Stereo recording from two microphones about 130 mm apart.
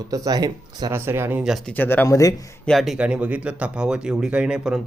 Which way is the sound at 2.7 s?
Centre (ahead or behind).